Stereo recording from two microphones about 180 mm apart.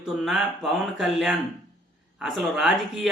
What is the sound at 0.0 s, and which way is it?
Speech, 5° right (ahead or behind).